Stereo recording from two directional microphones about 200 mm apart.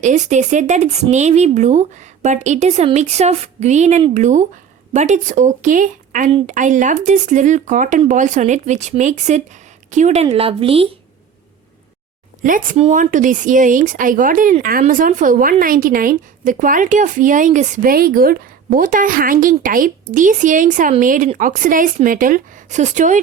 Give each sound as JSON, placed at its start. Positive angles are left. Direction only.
{"t": 0.0, "sound": "speech", "side_deg": -35}
{"t": 12.4, "sound": "a woman's voice", "side_deg": -40}